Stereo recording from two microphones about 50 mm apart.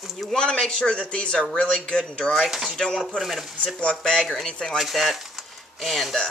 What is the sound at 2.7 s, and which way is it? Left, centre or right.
Speech, centre.